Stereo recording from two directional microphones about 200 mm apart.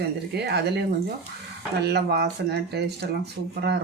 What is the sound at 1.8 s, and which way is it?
Speech, 55° right (ahead or behind).